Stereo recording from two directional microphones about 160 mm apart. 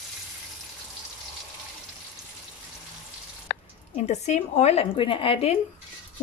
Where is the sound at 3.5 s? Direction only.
75° left (ahead or behind).